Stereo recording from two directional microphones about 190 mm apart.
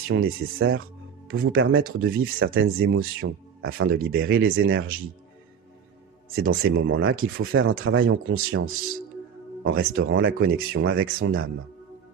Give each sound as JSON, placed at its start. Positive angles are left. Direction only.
{"t": 0.1, "sound": "speech", "side_deg": -90}
{"t": 6.4, "sound": "speech", "side_deg": -90}